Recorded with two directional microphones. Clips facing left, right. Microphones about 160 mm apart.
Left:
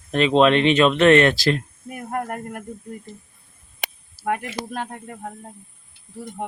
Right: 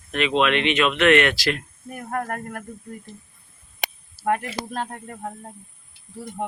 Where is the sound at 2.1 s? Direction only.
20° left (ahead or behind).